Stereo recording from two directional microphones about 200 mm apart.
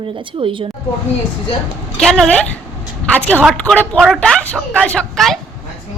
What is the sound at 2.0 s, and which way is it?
Speech, centre (ahead or behind).